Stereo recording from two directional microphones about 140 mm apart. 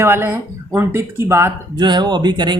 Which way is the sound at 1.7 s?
30° right (ahead or behind).